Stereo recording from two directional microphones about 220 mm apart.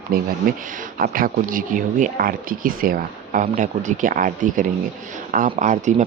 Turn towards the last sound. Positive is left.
turn(degrees=-35)  # may be behind; listen again after turning